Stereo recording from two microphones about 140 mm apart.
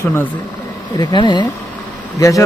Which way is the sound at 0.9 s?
30° left (ahead or behind).